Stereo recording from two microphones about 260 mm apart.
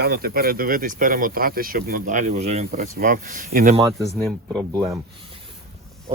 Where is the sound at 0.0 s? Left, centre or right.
Right.